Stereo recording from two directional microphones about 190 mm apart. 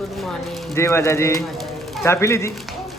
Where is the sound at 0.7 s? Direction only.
15° left (ahead or behind).